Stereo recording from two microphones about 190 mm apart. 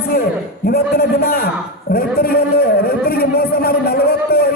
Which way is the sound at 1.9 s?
50° left (ahead or behind).